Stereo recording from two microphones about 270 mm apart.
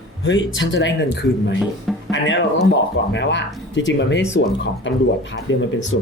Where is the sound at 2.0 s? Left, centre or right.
Left.